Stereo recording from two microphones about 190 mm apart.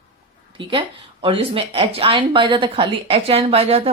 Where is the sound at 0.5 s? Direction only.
25° right (ahead or behind).